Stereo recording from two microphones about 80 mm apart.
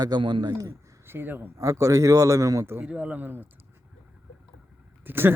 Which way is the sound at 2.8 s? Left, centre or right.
Centre.